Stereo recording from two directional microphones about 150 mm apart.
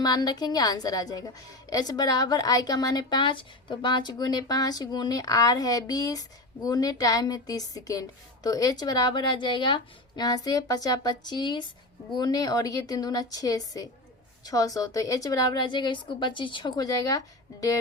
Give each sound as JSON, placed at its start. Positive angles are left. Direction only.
{"t": 0.0, "sound": "a woman's voice", "side_deg": 25}